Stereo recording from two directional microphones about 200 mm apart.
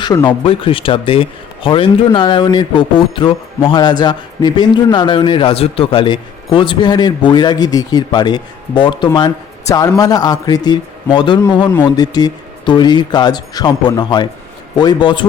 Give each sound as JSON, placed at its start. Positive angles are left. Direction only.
{"t": 0.0, "sound": "speech", "side_deg": 20}